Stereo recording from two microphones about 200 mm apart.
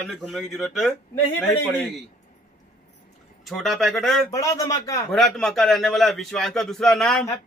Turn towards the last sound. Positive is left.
turn(degrees=5)  # may be behind; listen again after turning